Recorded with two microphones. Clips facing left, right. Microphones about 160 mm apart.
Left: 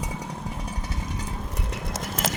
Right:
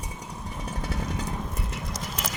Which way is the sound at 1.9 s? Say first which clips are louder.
Left 3 dB; 50° left (ahead or behind).